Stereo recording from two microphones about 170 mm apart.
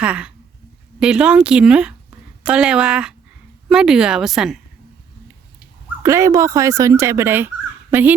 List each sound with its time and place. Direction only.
0.0 s speech: 5° right (ahead or behind)
6.0 s speech: 15° right (ahead or behind)